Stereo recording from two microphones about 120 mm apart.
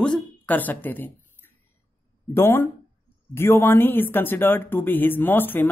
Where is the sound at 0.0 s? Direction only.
10° left (ahead or behind).